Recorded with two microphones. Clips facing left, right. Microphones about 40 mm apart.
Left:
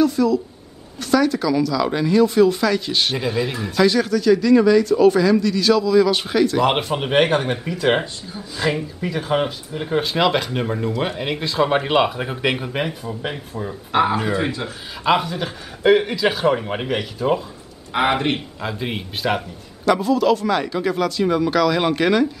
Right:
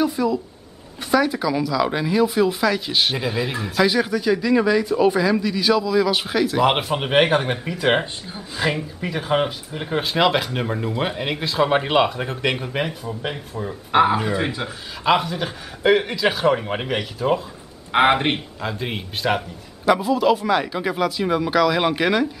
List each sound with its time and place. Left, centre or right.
0.0 s speech: centre
8.0 s speech: right
8.5 s speech: centre
17.9 s speech: right
18.6 s speech: centre
19.8 s speech: centre